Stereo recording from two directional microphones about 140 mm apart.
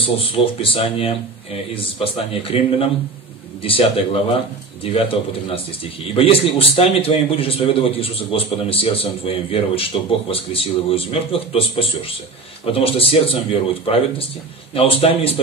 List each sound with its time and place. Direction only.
0.0 s a man's voice: 40° left (ahead or behind)